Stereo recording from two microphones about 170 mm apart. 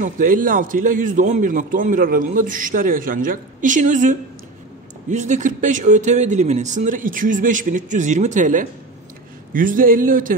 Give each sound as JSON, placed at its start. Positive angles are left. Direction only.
{"t": 0.0, "sound": "a man's voice", "side_deg": -55}